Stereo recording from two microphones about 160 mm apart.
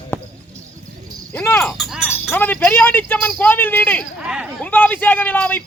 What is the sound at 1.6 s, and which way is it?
Speech, centre (ahead or behind).